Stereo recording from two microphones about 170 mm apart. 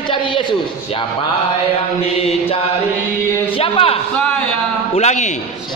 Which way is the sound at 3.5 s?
35° left (ahead or behind).